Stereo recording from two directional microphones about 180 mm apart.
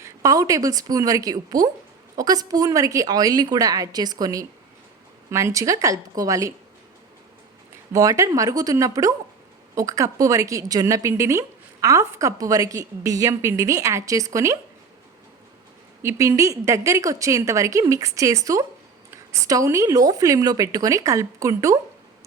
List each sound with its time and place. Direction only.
0.0 s a woman's voice: 20° right (ahead or behind)
7.9 s a woman's voice: 20° right (ahead or behind)
16.0 s a woman's voice: 15° right (ahead or behind)